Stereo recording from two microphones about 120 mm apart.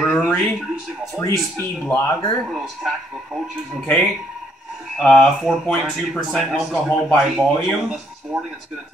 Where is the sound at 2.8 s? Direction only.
5° right (ahead or behind).